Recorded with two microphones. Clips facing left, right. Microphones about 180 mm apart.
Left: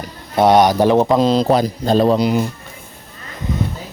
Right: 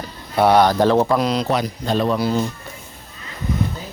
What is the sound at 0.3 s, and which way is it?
Speech, 20° left (ahead or behind).